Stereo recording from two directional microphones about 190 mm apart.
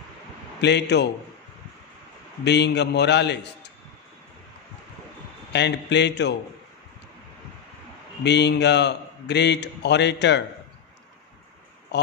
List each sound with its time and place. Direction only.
0.6 s a man's voice: 65° left (ahead or behind)
2.4 s a man's voice: 65° left (ahead or behind)
5.5 s a man's voice: 65° left (ahead or behind)
8.2 s a man's voice: 65° left (ahead or behind)